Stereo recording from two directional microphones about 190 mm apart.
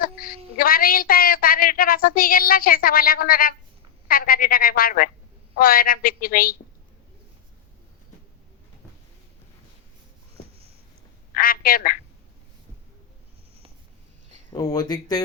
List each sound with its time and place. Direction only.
0.1 s a sound: 30° right (ahead or behind)
0.5 s a woman's voice: 50° left (ahead or behind)
11.3 s a woman's voice: 50° left (ahead or behind)
14.5 s speech: 20° left (ahead or behind)